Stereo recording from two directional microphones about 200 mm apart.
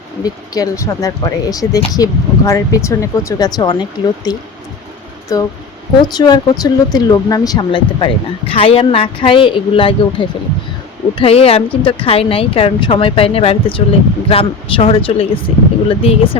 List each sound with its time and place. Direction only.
0.2 s speech: 20° left (ahead or behind)